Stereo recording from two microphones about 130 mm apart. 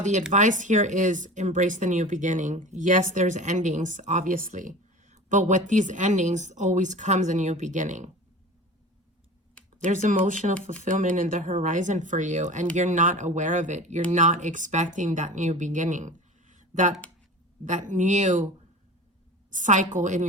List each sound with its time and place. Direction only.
0.3 s speech: 75° right (ahead or behind)
9.8 s speech: 75° right (ahead or behind)
19.5 s speech: 75° right (ahead or behind)